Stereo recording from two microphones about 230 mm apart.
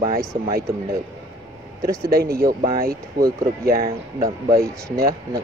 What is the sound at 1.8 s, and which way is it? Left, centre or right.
Speech, right.